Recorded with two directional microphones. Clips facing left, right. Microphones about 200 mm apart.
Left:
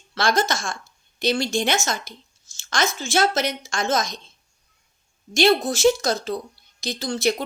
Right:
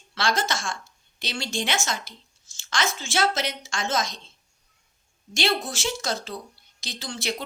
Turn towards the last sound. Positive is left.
turn(degrees=40)  # may be behind; listen again after turning